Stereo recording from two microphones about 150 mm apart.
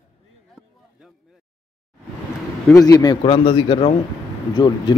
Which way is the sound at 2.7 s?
25° left (ahead or behind).